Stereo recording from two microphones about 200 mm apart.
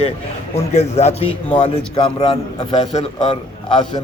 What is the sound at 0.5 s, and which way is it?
A man's voice, 35° left (ahead or behind).